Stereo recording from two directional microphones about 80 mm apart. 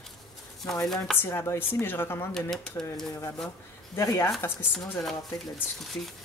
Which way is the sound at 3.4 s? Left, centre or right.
Left.